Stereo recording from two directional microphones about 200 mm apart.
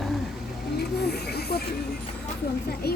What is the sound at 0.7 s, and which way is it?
Snake, 55° left (ahead or behind).